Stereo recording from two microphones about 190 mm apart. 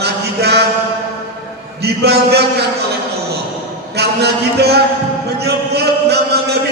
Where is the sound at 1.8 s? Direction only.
60° right (ahead or behind).